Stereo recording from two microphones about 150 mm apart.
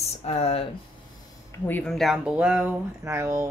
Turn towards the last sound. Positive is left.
turn(degrees=-15)  # may be behind; listen again after turning